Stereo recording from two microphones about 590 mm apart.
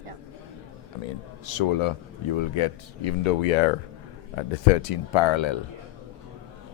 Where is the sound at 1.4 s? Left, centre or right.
Left.